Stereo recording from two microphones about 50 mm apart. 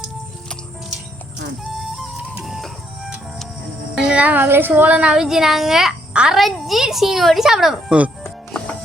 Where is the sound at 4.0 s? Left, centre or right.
Centre.